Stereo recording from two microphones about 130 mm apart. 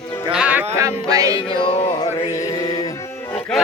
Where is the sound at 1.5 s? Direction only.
35° left (ahead or behind).